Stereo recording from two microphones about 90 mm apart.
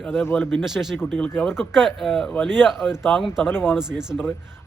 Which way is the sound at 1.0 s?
15° left (ahead or behind).